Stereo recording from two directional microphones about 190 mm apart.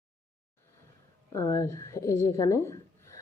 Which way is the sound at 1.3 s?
15° left (ahead or behind).